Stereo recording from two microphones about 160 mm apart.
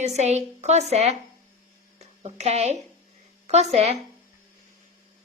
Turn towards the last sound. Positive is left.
turn(degrees=-40)  # may be behind; listen again after turning